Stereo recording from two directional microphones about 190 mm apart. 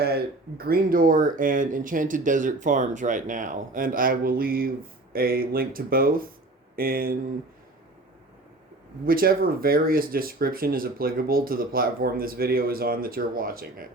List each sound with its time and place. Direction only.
0.0 s speech: 55° right (ahead or behind)
9.0 s speech: 50° right (ahead or behind)